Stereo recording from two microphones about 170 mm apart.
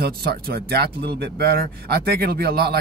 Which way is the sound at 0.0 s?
65° right (ahead or behind).